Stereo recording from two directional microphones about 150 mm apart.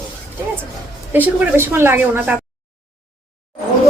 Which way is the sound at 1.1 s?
10° right (ahead or behind).